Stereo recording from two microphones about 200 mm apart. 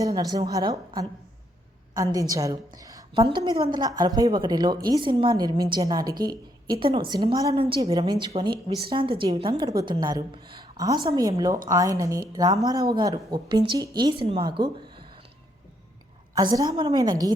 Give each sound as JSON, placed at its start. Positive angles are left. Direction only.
{"t": 0.0, "sound": "a woman's voice", "side_deg": -20}
{"t": 16.3, "sound": "a woman's voice", "side_deg": -20}